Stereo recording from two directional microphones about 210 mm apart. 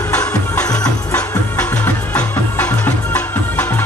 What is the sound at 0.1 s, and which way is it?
Music, 5° left (ahead or behind).